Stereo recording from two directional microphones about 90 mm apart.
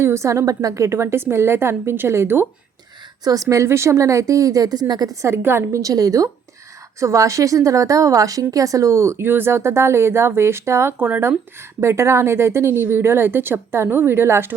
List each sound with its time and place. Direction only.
0.0 s speech: 30° right (ahead or behind)
3.2 s a woman's voice: 40° right (ahead or behind)
5.2 s speech: 25° right (ahead or behind)
5.8 s a woman's voice: 40° right (ahead or behind)